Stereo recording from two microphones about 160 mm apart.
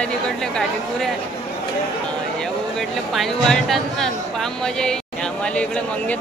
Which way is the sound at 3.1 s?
Centre (ahead or behind).